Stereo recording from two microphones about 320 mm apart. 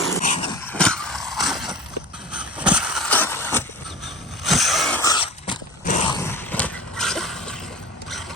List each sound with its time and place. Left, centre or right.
0.3 s dog: centre
0.6 s vehicle: centre
4.0 s a sound: centre